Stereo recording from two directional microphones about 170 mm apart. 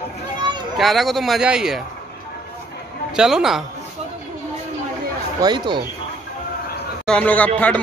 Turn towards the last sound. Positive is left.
turn(degrees=10)  # may be behind; listen again after turning